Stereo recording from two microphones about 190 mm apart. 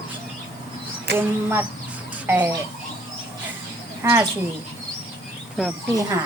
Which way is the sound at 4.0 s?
10° right (ahead or behind).